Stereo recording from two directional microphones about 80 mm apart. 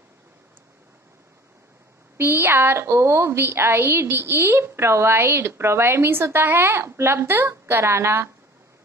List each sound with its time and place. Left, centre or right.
2.1 s a woman's voice: right